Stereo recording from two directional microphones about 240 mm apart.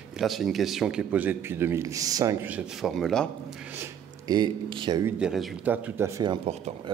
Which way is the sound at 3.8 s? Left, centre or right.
Centre.